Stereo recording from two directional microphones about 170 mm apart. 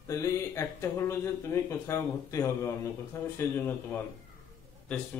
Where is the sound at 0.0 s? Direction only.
20° left (ahead or behind).